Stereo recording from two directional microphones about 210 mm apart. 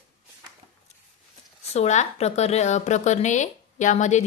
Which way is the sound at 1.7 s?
30° left (ahead or behind).